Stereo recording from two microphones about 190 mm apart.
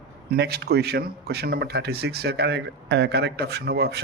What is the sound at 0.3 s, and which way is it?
Speech, 55° right (ahead or behind).